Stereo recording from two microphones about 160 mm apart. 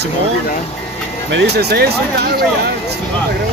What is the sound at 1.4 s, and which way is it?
Speech, 85° right.